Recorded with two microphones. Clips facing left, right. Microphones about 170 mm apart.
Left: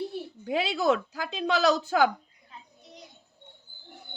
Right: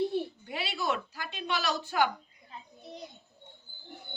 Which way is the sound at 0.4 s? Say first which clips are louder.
Left 8 dB; 90° left.